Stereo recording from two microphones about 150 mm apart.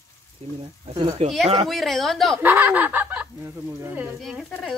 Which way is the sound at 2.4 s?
10° right (ahead or behind).